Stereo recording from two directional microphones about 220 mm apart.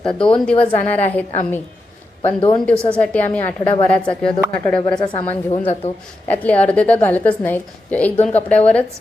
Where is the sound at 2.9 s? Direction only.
5° left (ahead or behind).